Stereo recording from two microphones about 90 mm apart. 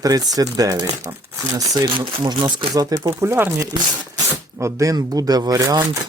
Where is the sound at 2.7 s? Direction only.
45° right (ahead or behind).